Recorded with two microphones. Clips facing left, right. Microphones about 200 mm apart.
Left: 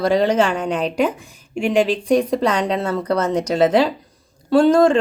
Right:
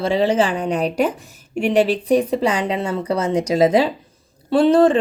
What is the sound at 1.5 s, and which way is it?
Speech, 40° right (ahead or behind).